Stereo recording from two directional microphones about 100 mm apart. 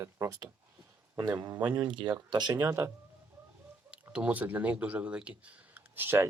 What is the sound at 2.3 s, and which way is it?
Speech, 45° right (ahead or behind).